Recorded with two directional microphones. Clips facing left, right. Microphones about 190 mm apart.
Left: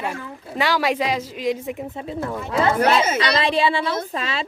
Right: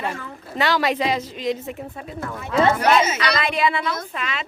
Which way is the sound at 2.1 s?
25° left (ahead or behind).